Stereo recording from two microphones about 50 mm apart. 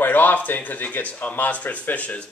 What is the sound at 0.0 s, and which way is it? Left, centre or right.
A man's voice, left.